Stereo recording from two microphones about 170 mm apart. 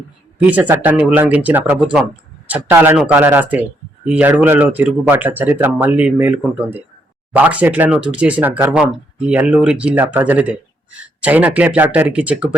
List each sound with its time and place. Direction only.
0.3 s speech: 10° right (ahead or behind)